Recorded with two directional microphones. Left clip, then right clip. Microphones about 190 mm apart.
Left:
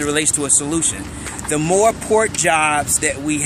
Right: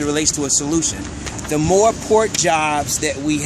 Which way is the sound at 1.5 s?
5° left (ahead or behind).